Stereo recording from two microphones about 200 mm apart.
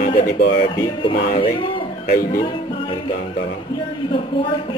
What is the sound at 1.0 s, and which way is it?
Speech, 25° left (ahead or behind).